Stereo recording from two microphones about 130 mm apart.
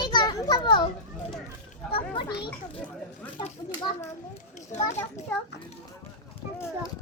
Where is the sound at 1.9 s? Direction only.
40° left (ahead or behind).